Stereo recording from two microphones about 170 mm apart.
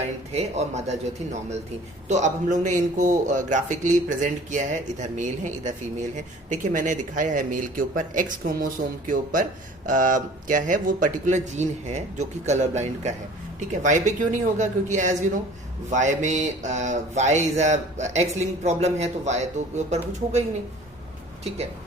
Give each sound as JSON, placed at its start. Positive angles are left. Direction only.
{"t": 0.0, "sound": "speech", "side_deg": -40}